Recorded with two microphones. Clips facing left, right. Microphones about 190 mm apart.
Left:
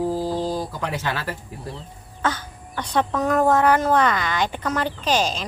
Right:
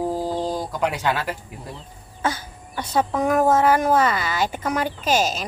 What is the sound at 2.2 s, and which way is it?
Speech, 10° right (ahead or behind).